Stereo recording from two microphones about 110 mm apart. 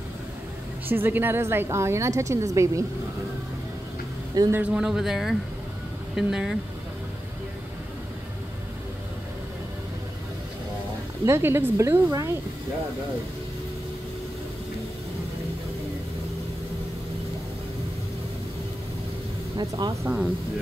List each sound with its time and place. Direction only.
0.8 s a woman's voice: 20° right (ahead or behind)
4.5 s speech: 15° right (ahead or behind)
11.2 s a woman's voice: 25° right (ahead or behind)
12.1 s speech: 30° right (ahead or behind)
19.5 s speech: 35° right (ahead or behind)